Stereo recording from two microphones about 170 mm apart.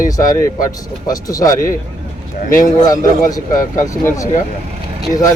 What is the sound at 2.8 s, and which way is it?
Speech, 20° left (ahead or behind).